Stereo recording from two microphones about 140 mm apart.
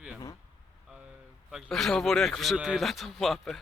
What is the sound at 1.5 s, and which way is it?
Speech, centre (ahead or behind).